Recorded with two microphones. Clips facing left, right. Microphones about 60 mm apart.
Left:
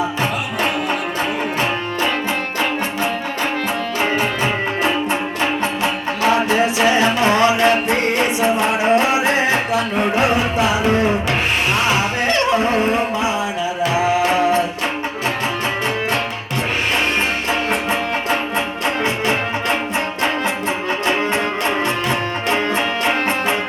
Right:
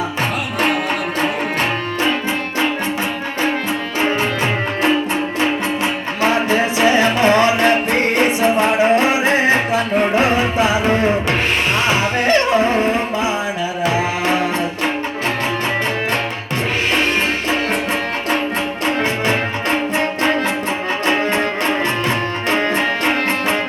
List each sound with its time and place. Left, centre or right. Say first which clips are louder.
7.0 s music: right 1 dB; right
12.3 s music: right 3 dB; right
21.1 s music: right 2 dB; right